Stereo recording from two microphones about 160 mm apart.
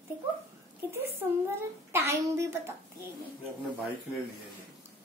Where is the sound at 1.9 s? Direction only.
15° right (ahead or behind).